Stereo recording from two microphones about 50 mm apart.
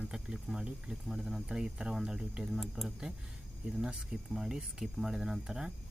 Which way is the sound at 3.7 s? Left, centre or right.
Centre.